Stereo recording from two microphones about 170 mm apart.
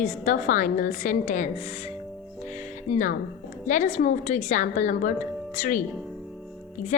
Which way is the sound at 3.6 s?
45° left (ahead or behind).